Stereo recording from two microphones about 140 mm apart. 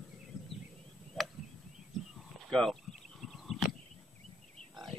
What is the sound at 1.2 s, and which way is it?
Chop, centre (ahead or behind).